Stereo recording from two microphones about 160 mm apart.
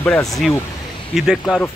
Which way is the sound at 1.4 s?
10° left (ahead or behind).